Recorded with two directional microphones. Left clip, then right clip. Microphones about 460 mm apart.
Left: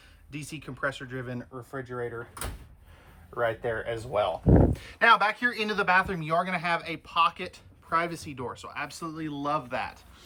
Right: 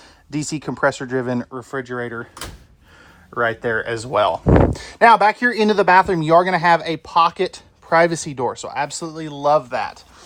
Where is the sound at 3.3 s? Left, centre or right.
Right.